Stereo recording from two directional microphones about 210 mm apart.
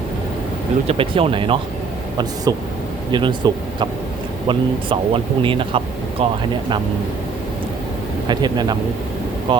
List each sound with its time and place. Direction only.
0.9 s speech: 25° right (ahead or behind)
8.3 s speech: 20° right (ahead or behind)